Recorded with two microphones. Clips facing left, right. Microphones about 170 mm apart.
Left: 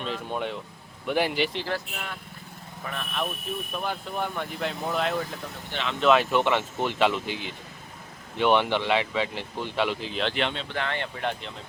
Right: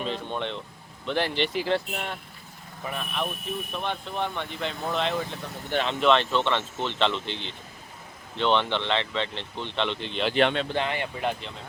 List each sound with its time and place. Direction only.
0.0 s speech: 5° left (ahead or behind)
1.6 s speech: 25° right (ahead or behind)
2.8 s speech: 10° right (ahead or behind)
10.3 s speech: 55° right (ahead or behind)
10.8 s speech: 15° right (ahead or behind)